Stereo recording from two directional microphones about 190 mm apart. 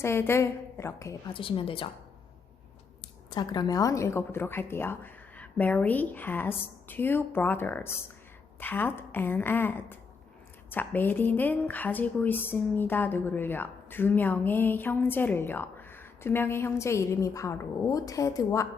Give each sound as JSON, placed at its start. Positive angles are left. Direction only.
{"t": 0.0, "sound": "speech", "side_deg": 15}
{"t": 1.3, "sound": "a woman's voice", "side_deg": 25}
{"t": 3.2, "sound": "speech", "side_deg": 20}